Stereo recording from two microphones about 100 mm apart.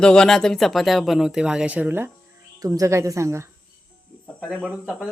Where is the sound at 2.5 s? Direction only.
35° right (ahead or behind).